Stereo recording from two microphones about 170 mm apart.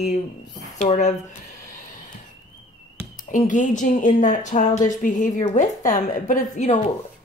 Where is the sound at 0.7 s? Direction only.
45° left (ahead or behind).